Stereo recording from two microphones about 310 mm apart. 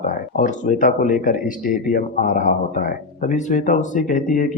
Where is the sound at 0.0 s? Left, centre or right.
Left.